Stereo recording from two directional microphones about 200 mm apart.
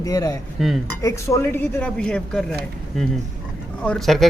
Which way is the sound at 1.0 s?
15° left (ahead or behind).